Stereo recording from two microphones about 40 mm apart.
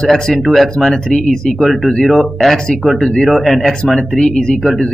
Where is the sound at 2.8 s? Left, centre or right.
Centre.